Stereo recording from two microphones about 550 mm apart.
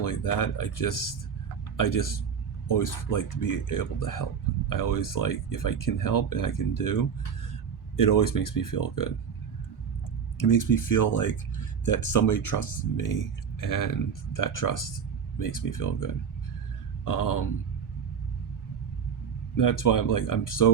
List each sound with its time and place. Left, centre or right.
0.0 s speech: left
10.3 s speech: left
19.5 s speech: left